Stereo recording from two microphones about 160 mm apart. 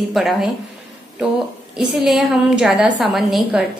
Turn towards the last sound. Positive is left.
turn(degrees=0)  # may be behind; listen again after turning